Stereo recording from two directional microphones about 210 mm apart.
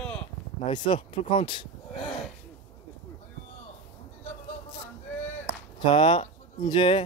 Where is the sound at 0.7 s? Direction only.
20° left (ahead or behind).